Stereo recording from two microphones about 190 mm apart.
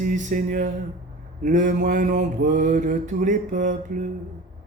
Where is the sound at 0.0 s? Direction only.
40° right (ahead or behind).